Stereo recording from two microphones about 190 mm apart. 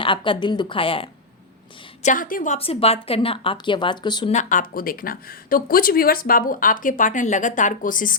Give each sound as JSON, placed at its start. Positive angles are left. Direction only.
{"t": 0.0, "sound": "speech", "side_deg": 25}
{"t": 2.0, "sound": "speech", "side_deg": 40}
{"t": 2.6, "sound": "speech", "side_deg": 30}
{"t": 4.3, "sound": "speech", "side_deg": 40}